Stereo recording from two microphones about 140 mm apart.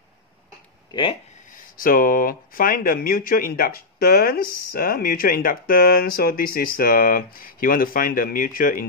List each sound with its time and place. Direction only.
1.8 s speech: 90° left